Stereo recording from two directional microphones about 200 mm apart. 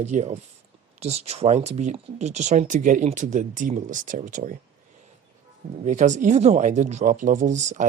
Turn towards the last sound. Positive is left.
turn(degrees=-35)  # may be behind; listen again after turning